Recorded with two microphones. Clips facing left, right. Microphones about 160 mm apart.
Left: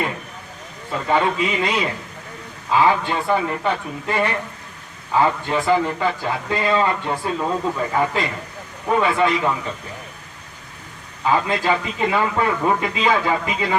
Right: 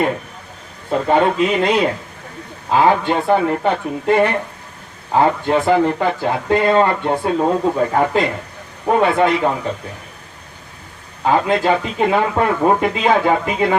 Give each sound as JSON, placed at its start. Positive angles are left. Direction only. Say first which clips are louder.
{"t": 0.9, "sound": "a man's voice", "louder": "right 5 dB", "side_deg": -50}
{"t": 11.3, "sound": "a man's voice", "louder": "right 4 dB", "side_deg": -50}